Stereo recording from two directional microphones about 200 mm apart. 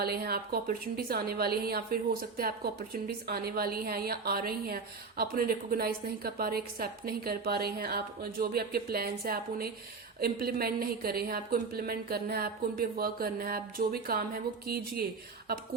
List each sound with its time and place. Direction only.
0.0 s a woman's voice: 50° right (ahead or behind)